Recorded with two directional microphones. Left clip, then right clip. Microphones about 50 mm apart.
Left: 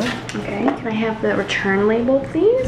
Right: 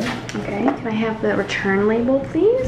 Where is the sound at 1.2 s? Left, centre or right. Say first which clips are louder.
Left 1 dB; left.